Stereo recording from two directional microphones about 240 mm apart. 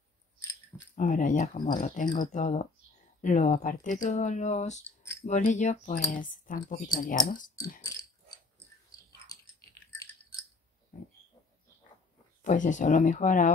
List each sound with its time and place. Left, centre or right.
0.9 s speech: left
9.3 s chewing: centre
12.4 s speech: left